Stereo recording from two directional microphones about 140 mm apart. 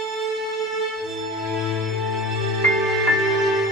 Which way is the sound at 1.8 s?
Centre (ahead or behind).